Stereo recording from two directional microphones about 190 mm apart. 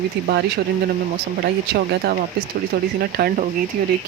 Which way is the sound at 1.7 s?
55° right (ahead or behind).